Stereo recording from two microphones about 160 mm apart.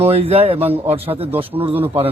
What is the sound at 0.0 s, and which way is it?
A man's voice, 40° right (ahead or behind).